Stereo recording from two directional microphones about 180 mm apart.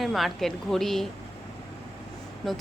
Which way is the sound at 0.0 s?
Centre (ahead or behind).